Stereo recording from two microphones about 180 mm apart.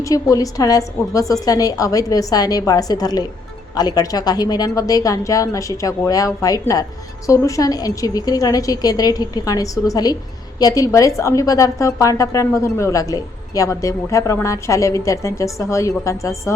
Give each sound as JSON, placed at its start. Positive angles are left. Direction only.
{"t": 0.0, "sound": "a woman's voice", "side_deg": 20}